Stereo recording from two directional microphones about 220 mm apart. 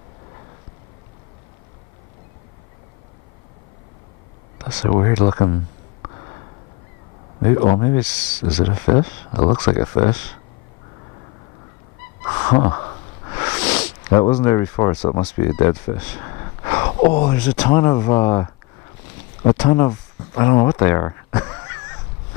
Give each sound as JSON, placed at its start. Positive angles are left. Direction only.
{"t": 4.8, "sound": "speech", "side_deg": 20}
{"t": 7.4, "sound": "speech", "side_deg": 25}
{"t": 12.3, "sound": "a sound", "side_deg": 20}
{"t": 14.2, "sound": "speech", "side_deg": 15}
{"t": 16.1, "sound": "gasp", "side_deg": 15}
{"t": 17.1, "sound": "speech", "side_deg": 20}
{"t": 17.4, "sound": "speech", "side_deg": 5}
{"t": 17.6, "sound": "speech", "side_deg": 15}